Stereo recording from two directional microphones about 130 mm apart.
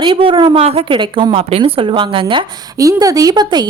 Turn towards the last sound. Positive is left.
turn(degrees=-30)  # may be behind; listen again after turning